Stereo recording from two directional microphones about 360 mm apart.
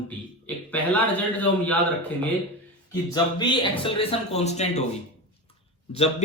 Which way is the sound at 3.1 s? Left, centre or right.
Centre.